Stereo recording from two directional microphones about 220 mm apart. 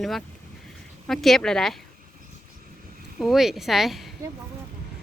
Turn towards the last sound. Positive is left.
turn(degrees=0)  # may be behind; listen again after turning